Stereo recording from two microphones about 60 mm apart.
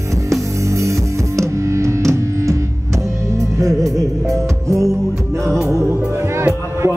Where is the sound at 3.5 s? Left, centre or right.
Right.